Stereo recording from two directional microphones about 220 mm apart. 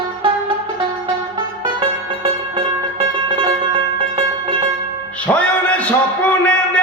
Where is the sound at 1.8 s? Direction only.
25° right (ahead or behind).